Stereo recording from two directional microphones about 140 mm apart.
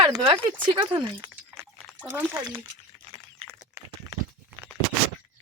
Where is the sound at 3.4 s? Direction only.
20° right (ahead or behind).